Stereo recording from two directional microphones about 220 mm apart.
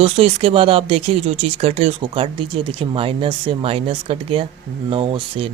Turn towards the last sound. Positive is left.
turn(degrees=-25)  # may be behind; listen again after turning